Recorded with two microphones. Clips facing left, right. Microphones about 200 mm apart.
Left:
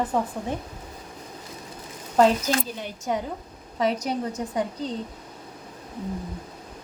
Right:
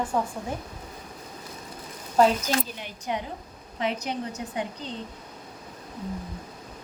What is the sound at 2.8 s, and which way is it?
A woman's voice, 45° left (ahead or behind).